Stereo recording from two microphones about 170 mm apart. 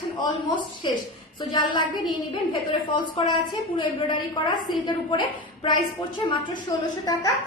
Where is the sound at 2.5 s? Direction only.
30° left (ahead or behind).